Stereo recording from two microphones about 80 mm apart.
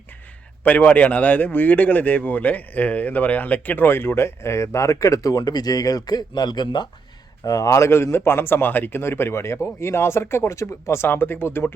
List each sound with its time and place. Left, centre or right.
0.6 s speech: centre; by 6.8 s left
7.4 s speech: left